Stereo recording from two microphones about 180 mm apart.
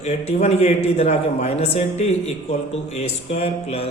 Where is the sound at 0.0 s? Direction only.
35° left (ahead or behind).